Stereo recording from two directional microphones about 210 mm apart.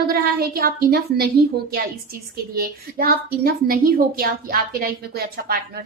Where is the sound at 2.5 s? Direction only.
45° right (ahead or behind).